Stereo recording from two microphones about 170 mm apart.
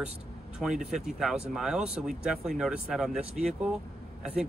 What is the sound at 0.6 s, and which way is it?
Speech, 5° right (ahead or behind).